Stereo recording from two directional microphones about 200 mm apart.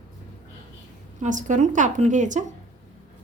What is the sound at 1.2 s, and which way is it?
A woman's voice, 40° right (ahead or behind).